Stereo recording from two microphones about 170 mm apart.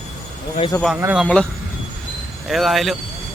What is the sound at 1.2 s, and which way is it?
Speech, 5° left (ahead or behind).